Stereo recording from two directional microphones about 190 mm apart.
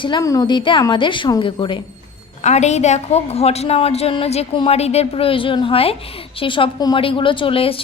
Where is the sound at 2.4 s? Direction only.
35° left (ahead or behind).